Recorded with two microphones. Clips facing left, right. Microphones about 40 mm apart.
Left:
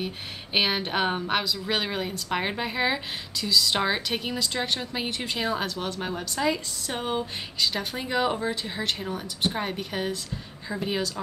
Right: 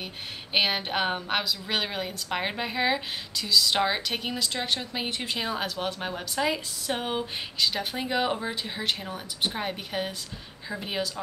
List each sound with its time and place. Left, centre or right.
0.0 s a woman's voice: centre